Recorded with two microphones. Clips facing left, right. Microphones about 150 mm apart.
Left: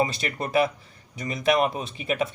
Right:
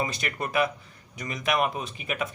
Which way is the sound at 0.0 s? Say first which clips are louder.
Left 4 dB; 30° left (ahead or behind).